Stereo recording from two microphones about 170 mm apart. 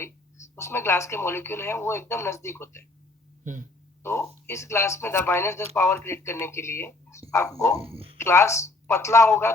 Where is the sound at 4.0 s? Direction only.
15° left (ahead or behind).